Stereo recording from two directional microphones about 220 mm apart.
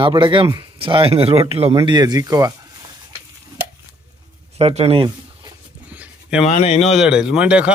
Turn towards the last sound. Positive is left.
turn(degrees=-5)  # may be behind; listen again after turning